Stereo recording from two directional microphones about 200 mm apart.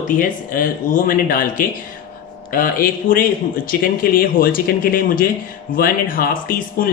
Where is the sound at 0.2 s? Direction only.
45° left (ahead or behind).